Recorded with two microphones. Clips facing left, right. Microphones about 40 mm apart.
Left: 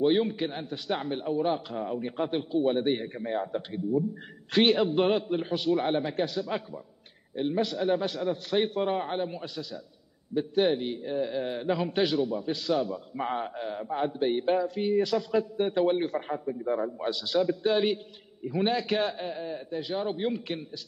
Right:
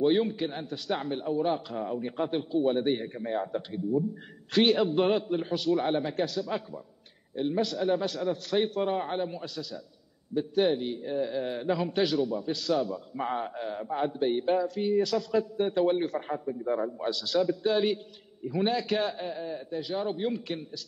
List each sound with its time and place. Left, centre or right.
0.0 s a man's voice: centre
4.5 s a man's voice: centre
14.2 s a man's voice: centre
16.3 s a man's voice: centre
17.0 s a man's voice: centre